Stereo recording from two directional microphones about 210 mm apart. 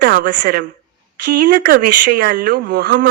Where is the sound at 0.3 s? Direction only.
45° right (ahead or behind).